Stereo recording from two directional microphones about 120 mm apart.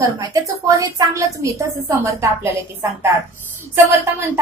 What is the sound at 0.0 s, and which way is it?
Speech, 30° right (ahead or behind).